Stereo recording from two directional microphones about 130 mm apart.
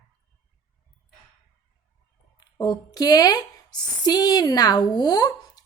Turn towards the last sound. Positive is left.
turn(degrees=30)  # may be behind; listen again after turning